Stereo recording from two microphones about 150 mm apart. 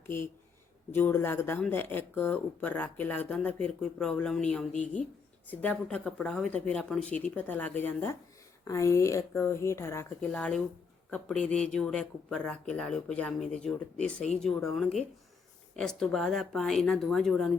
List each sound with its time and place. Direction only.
0.9 s speech: 15° left (ahead or behind)
4.7 s a woman's voice: 55° left (ahead or behind)
5.5 s speech: 10° left (ahead or behind)